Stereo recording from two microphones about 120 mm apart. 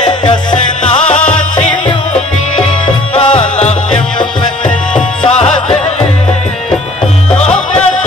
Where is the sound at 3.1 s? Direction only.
55° left (ahead or behind).